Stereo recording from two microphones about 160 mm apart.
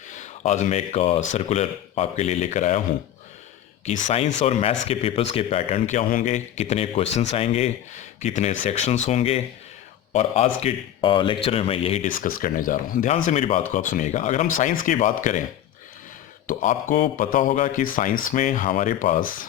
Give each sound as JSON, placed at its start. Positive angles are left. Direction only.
{"t": 0.1, "sound": "speech", "side_deg": 50}
{"t": 3.8, "sound": "speech", "side_deg": 50}
{"t": 6.2, "sound": "speech", "side_deg": 45}
{"t": 12.0, "sound": "speech", "side_deg": 60}
{"t": 16.5, "sound": "speech", "side_deg": 55}